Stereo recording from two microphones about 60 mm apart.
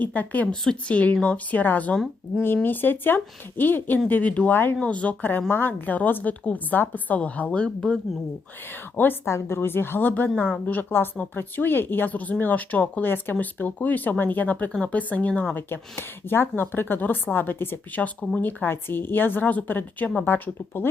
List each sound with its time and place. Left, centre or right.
0.0 s a woman's voice: left
0.5 s speech: centre
0.9 s a woman's voice: left
4.5 s speech: left
4.8 s a woman's voice: left
8.7 s speech: left
9.2 s speech: left
10.3 s a woman's voice: left
15.5 s speech: left